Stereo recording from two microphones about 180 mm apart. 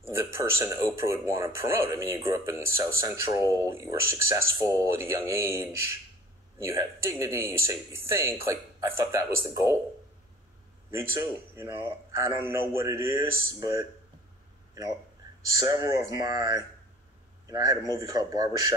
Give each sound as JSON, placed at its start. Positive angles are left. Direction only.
{"t": 0.2, "sound": "speech", "side_deg": -15}
{"t": 10.9, "sound": "a man's voice", "side_deg": -15}
{"t": 15.5, "sound": "a man's voice", "side_deg": -20}